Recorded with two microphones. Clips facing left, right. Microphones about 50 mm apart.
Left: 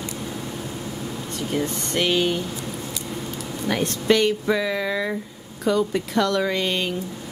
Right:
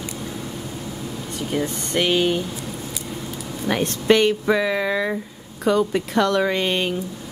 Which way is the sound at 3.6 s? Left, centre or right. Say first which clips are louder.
Right 2 dB; right.